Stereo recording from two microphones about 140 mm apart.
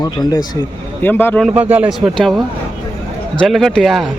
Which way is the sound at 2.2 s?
5° left (ahead or behind).